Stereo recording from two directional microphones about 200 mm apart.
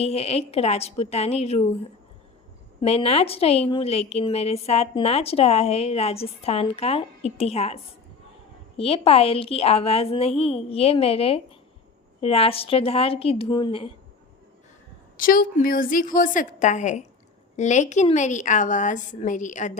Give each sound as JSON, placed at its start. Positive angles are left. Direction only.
{"t": 0.0, "sound": "a woman's voice", "side_deg": 30}
{"t": 2.8, "sound": "a woman's voice", "side_deg": 30}
{"t": 8.8, "sound": "a woman's voice", "side_deg": 30}
{"t": 15.2, "sound": "a woman's voice", "side_deg": 45}